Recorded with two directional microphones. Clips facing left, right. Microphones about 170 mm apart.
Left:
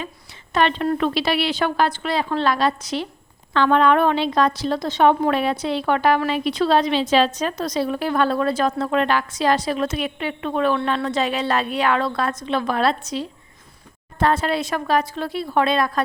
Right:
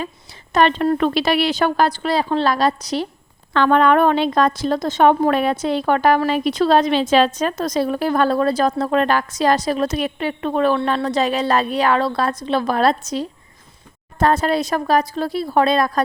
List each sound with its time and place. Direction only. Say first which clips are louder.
0.5 s a woman's voice: right 4 dB; 45° right (ahead or behind)
3.5 s a woman's voice: right 2 dB; 50° right (ahead or behind)